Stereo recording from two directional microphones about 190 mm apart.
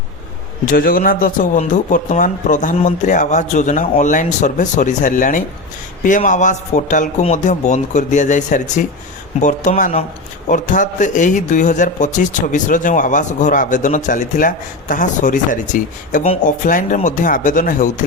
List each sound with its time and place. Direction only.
0.7 s speech: 50° left (ahead or behind)
16.2 s speech: 30° left (ahead or behind)
16.6 s speech: 45° left (ahead or behind)